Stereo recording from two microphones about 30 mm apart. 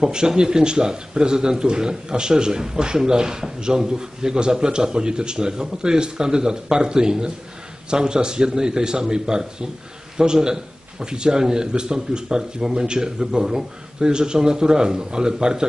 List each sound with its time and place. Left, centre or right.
0.0 s speech: right